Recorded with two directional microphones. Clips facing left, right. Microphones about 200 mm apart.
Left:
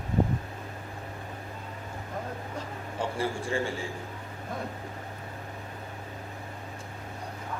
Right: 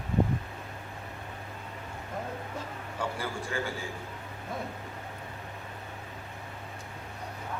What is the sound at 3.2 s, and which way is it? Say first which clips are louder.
Speech: left 4 dB; 30° left (ahead or behind).